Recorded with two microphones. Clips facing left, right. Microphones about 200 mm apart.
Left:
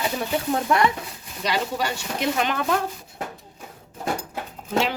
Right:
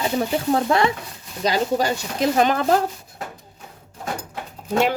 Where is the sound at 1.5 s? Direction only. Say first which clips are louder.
Right 5 dB; 40° right (ahead or behind).